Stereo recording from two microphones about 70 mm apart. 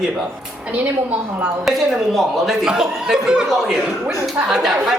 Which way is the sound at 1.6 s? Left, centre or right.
Centre.